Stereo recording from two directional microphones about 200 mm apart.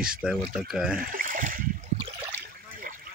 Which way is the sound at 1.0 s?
45° right (ahead or behind).